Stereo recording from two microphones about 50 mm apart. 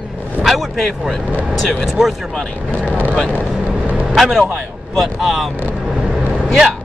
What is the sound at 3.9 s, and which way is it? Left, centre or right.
Vehicle, right.